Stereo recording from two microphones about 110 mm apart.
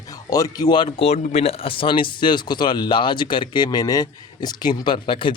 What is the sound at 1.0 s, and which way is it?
Speech, 70° left (ahead or behind).